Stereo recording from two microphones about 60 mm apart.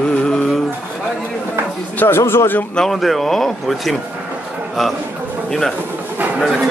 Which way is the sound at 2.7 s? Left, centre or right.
Centre.